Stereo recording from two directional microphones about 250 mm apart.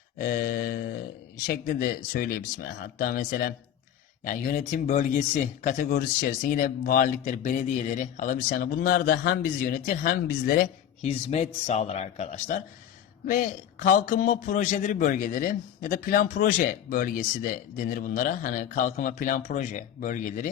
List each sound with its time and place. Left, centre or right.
0.2 s speech: left